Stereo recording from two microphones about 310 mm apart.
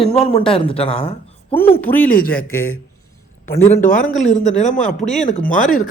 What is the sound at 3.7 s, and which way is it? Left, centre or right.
Speech, left.